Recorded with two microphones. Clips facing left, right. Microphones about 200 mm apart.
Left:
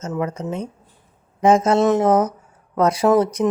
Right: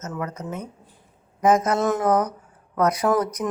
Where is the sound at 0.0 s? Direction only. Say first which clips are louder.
Left 6 dB; 25° left (ahead or behind).